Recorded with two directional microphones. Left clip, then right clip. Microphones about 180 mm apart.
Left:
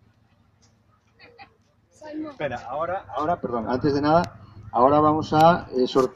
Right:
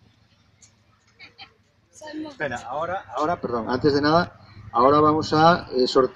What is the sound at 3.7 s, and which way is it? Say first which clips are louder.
Speech: right 1 dB; 25° left (ahead or behind).